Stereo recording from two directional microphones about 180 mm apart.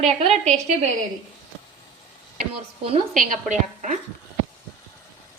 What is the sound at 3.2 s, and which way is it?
Speech, 45° right (ahead or behind).